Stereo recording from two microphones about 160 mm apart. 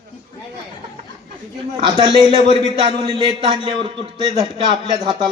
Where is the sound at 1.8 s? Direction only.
30° right (ahead or behind).